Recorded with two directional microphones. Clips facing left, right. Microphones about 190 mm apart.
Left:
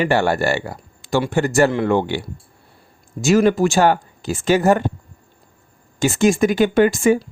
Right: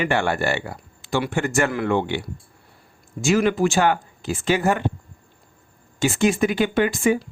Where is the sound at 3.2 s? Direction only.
40° left (ahead or behind).